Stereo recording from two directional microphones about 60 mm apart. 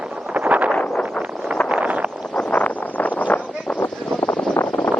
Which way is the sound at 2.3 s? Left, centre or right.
Left.